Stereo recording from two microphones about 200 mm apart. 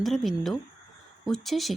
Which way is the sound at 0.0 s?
Centre (ahead or behind).